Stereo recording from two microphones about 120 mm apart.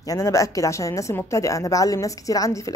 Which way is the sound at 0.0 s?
25° left (ahead or behind).